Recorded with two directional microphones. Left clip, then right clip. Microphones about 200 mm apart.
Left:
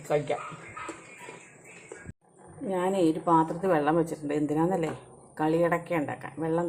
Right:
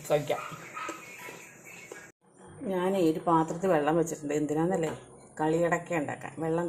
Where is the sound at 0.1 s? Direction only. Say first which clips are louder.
Even; 5° left (ahead or behind).